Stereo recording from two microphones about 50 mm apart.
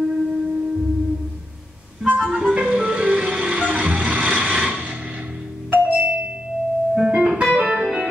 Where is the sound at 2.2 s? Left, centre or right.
Right.